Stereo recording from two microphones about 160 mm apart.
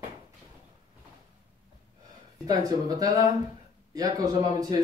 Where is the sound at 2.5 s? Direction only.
25° right (ahead or behind).